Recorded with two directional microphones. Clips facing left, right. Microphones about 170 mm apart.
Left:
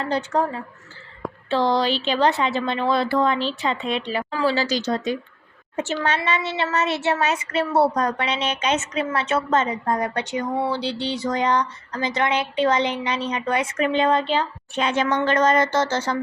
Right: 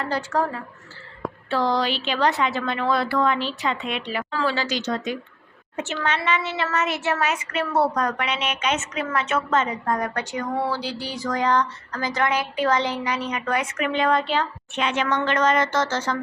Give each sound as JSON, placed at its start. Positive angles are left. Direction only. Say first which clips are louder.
{"t": 0.0, "sound": "a woman's voice", "louder": "left 2 dB", "side_deg": 20}
{"t": 14.8, "sound": "speech", "louder": "left 2 dB", "side_deg": 35}